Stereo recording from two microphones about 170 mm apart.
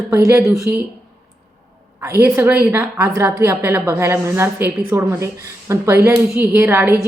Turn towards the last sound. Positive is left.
turn(degrees=-15)  # may be behind; listen again after turning